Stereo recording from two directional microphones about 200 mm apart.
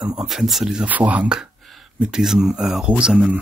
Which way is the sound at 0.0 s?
5° right (ahead or behind).